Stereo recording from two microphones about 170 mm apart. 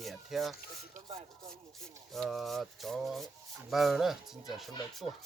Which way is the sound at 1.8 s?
Centre (ahead or behind).